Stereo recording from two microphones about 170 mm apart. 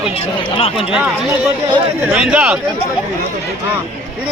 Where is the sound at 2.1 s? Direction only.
5° right (ahead or behind).